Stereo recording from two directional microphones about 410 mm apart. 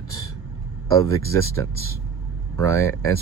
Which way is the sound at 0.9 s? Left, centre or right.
Centre.